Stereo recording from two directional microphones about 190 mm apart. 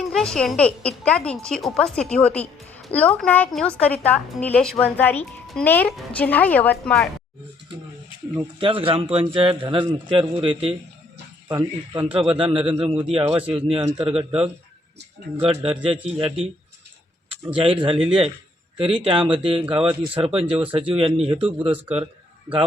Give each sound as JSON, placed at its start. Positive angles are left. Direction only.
{"t": 0.0, "sound": "a woman's voice", "side_deg": 5}
{"t": 8.5, "sound": "speech", "side_deg": -30}
{"t": 17.5, "sound": "speech", "side_deg": -30}